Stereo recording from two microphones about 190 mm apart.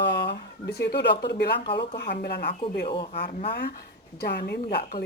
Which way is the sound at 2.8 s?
25° left (ahead or behind).